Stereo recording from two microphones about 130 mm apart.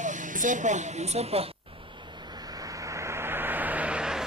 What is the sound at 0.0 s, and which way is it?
Speech, 75° right (ahead or behind).